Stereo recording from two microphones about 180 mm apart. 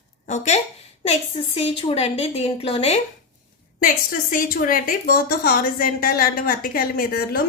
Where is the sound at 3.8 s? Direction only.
50° left (ahead or behind).